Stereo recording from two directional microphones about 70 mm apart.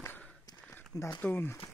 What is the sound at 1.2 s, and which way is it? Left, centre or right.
Speech, left.